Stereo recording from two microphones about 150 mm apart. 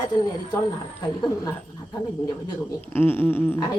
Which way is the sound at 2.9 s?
15° left (ahead or behind).